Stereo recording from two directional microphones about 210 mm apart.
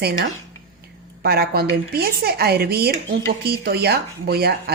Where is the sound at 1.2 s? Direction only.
50° right (ahead or behind).